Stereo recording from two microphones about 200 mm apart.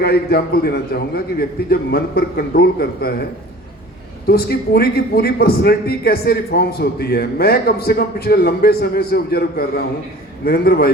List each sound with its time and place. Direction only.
0.0 s a man's voice: 50° left (ahead or behind)
4.3 s a man's voice: 50° left (ahead or behind)